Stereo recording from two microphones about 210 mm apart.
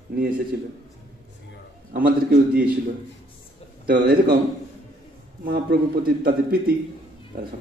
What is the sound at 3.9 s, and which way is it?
Speech, 45° right (ahead or behind).